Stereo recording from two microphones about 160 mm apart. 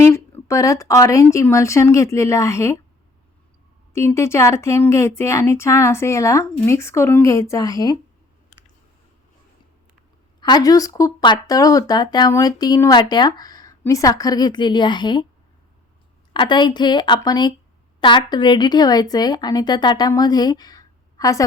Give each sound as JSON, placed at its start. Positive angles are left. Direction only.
{"t": 0.0, "sound": "speech", "side_deg": 15}
{"t": 3.9, "sound": "speech", "side_deg": 15}
{"t": 10.4, "sound": "speech", "side_deg": 25}
{"t": 16.3, "sound": "speech", "side_deg": 30}